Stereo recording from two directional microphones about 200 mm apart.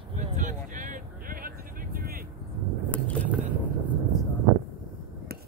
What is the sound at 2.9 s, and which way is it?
Vehicle, 5° left (ahead or behind).